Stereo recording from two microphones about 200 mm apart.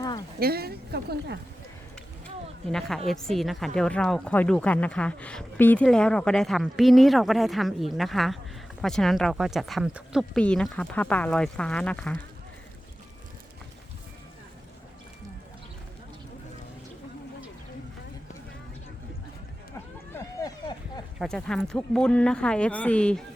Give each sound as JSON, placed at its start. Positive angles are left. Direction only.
{"t": 0.3, "sound": "speech", "side_deg": -50}
{"t": 3.1, "sound": "speech", "side_deg": 0}
{"t": 20.1, "sound": "a sound", "side_deg": 20}
{"t": 21.2, "sound": "speech", "side_deg": 0}